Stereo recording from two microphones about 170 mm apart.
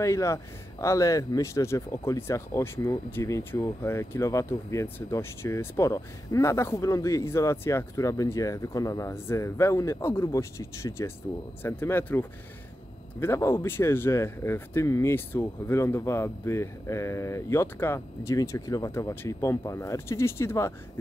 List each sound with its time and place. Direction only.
0.0 s speech: 15° left (ahead or behind)